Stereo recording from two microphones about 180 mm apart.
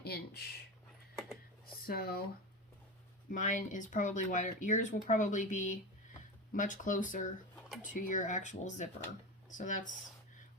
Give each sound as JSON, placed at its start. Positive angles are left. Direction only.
{"t": 0.0, "sound": "speech", "side_deg": 65}
{"t": 1.9, "sound": "speech", "side_deg": 55}
{"t": 3.3, "sound": "speech", "side_deg": 45}